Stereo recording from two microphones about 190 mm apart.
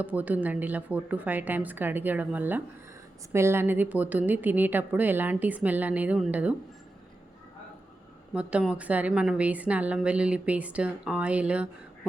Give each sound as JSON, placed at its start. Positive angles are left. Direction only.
{"t": 0.0, "sound": "a woman's voice", "side_deg": -10}
{"t": 8.3, "sound": "a woman's voice", "side_deg": -5}